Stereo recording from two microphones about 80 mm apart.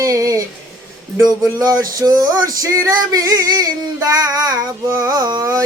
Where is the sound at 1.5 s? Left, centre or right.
Right.